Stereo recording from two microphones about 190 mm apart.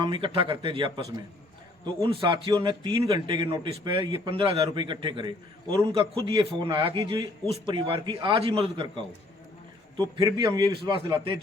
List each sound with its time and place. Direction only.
0.0 s a man's voice: 25° right (ahead or behind)